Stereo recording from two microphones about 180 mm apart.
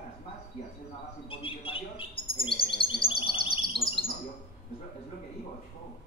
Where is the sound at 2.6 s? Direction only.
30° left (ahead or behind).